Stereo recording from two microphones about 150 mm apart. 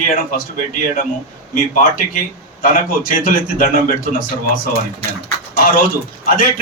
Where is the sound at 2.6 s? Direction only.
65° left (ahead or behind).